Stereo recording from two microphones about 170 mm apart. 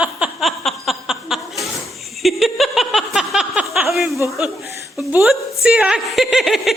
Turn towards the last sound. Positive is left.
turn(degrees=0)  # may be behind; listen again after turning